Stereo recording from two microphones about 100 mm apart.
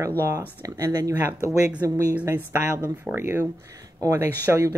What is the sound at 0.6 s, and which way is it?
Speech, 35° right (ahead or behind).